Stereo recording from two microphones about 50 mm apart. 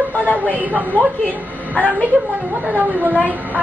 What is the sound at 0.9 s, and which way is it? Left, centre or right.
Speech, left.